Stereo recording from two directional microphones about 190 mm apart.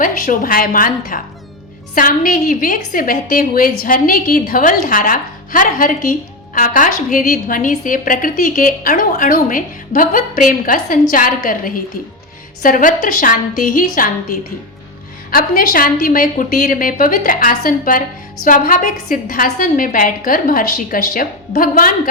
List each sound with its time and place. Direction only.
0.0 s a woman's voice: 45° left (ahead or behind)